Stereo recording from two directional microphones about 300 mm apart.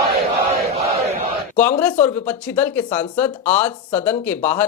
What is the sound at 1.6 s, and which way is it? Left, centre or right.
Speech, centre.